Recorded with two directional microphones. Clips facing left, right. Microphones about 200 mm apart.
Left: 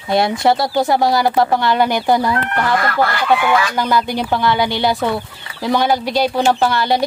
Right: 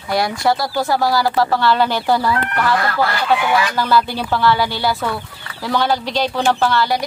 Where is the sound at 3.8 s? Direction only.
15° left (ahead or behind).